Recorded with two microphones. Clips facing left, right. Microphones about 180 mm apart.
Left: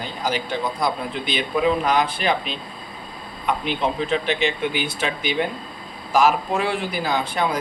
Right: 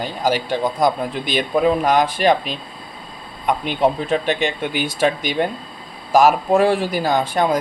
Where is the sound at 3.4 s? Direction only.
45° right (ahead or behind).